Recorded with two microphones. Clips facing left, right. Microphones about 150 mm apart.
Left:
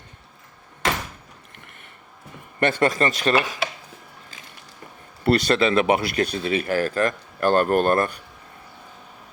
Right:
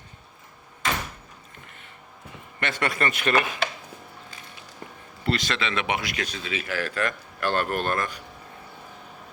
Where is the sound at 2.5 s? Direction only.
40° left (ahead or behind).